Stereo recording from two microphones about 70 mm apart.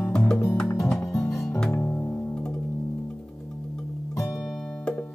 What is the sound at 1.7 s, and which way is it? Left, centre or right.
Music, left.